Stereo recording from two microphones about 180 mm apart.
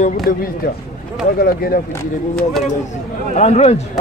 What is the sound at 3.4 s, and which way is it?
Speech, 35° left (ahead or behind).